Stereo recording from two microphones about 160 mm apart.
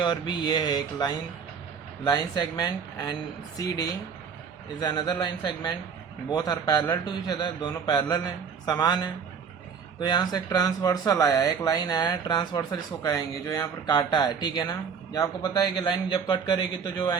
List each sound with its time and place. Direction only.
0.0 s speech: 25° left (ahead or behind)
4.8 s speech: 25° left (ahead or behind)